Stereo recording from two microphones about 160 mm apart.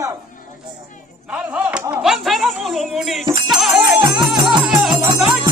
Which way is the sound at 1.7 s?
10° right (ahead or behind).